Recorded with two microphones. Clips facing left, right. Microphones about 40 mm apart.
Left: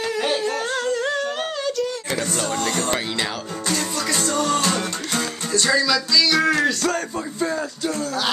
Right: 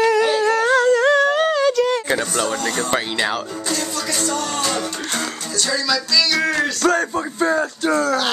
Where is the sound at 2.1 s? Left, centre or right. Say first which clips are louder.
Right 4 dB; right.